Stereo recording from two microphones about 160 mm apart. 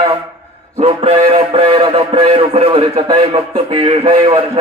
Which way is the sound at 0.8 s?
35° right (ahead or behind).